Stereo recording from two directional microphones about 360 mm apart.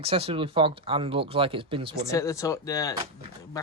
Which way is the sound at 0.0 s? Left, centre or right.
Centre.